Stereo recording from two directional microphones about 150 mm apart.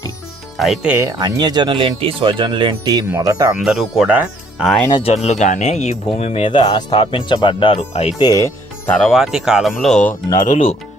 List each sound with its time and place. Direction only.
0.5 s speech: centre (ahead or behind)
0.9 s speech: 25° right (ahead or behind)
3.6 s speech: 5° right (ahead or behind)
4.9 s speech: 30° left (ahead or behind)
5.1 s speech: 50° left (ahead or behind); by 7.8 s 30° left (ahead or behind)
7.8 s speech: 45° left (ahead or behind)
8.2 s speech: 25° left (ahead or behind)
8.9 s speech: centre (ahead or behind)